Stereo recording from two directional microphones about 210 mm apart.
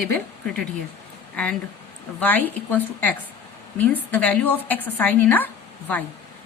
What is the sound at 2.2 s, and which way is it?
A woman's voice, 10° left (ahead or behind).